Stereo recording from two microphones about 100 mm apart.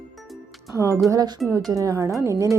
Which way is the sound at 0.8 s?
30° right (ahead or behind).